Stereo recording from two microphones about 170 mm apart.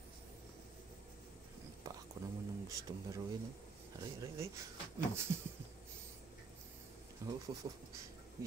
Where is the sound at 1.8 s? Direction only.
20° right (ahead or behind).